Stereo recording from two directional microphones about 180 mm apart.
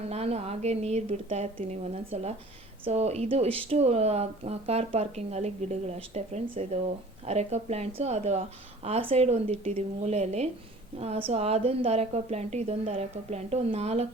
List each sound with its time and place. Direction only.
0.0 s a woman's voice: 35° right (ahead or behind)